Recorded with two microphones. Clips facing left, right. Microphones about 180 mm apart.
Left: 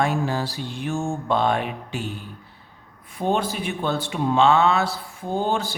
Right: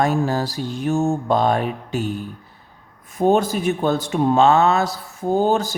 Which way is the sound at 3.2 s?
45° right (ahead or behind).